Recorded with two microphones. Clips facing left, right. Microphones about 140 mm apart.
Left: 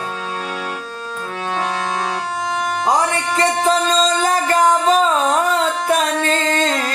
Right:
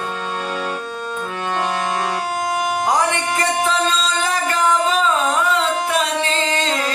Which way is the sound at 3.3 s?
40° left (ahead or behind).